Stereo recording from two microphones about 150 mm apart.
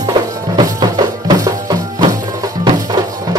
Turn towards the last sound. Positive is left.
turn(degrees=-25)  # may be behind; listen again after turning